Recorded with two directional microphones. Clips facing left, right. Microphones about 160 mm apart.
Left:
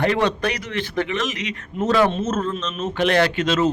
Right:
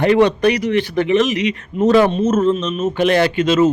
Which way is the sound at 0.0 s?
15° right (ahead or behind).